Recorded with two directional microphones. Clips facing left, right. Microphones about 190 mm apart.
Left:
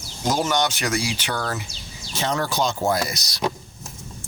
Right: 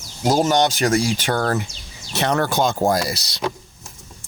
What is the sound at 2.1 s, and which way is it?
Speech, 65° right (ahead or behind).